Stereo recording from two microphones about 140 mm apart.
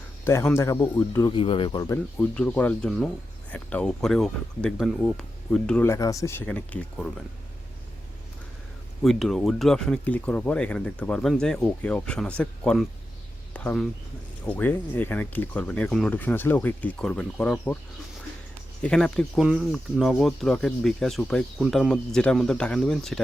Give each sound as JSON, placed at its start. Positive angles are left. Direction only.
{"t": 0.3, "sound": "speech", "side_deg": 20}
{"t": 1.3, "sound": "speech", "side_deg": 40}
{"t": 1.9, "sound": "speech", "side_deg": 15}
{"t": 5.8, "sound": "speech", "side_deg": 20}
{"t": 9.0, "sound": "speech", "side_deg": 0}
{"t": 18.8, "sound": "speech", "side_deg": 5}
{"t": 19.4, "sound": "speech", "side_deg": -5}